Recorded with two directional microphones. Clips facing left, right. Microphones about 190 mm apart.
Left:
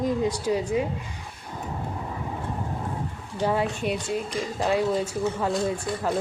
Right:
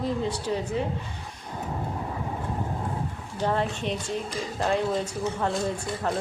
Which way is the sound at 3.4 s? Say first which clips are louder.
Left 2 dB; 10° left (ahead or behind).